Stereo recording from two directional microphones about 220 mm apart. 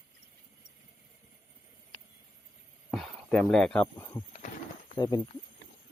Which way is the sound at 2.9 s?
Centre (ahead or behind).